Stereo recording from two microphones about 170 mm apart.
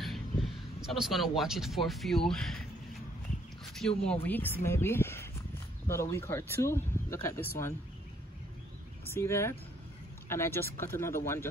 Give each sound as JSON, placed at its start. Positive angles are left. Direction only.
{"t": 0.0, "sound": "speech", "side_deg": 0}
{"t": 4.1, "sound": "speech", "side_deg": 10}
{"t": 4.6, "sound": "a sound", "side_deg": 15}
{"t": 5.9, "sound": "speech", "side_deg": 15}
{"t": 9.0, "sound": "speech", "side_deg": 15}